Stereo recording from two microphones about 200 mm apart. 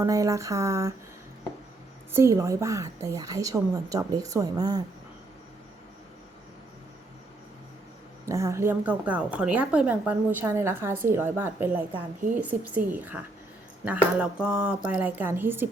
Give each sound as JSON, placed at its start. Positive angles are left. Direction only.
{"t": 0.0, "sound": "a woman's voice", "side_deg": -15}
{"t": 2.1, "sound": "a woman's voice", "side_deg": -15}
{"t": 8.3, "sound": "a woman's voice", "side_deg": -15}